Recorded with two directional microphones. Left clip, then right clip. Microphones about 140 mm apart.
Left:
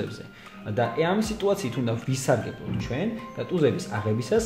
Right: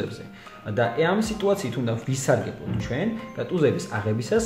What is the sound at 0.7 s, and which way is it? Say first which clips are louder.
Speech: right 2 dB; 20° left (ahead or behind).